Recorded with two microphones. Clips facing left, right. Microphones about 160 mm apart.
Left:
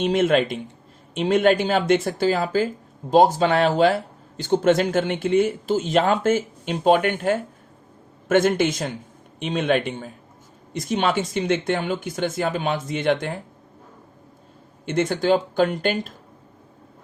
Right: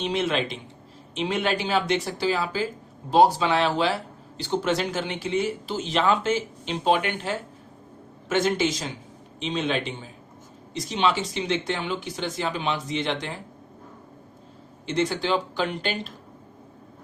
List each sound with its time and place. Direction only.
0.0 s speech: 50° left (ahead or behind)
14.8 s speech: 50° left (ahead or behind)